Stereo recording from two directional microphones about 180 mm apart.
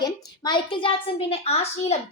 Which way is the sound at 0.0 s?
25° left (ahead or behind).